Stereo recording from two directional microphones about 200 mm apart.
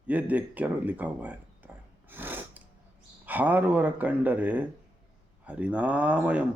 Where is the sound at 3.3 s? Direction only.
10° right (ahead or behind).